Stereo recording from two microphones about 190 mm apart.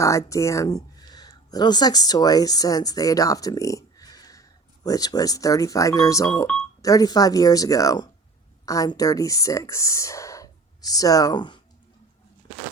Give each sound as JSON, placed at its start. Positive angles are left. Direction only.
{"t": 0.0, "sound": "speech", "side_deg": 15}